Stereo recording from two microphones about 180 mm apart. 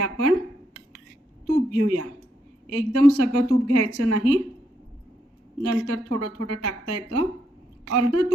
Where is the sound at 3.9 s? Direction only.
60° right (ahead or behind).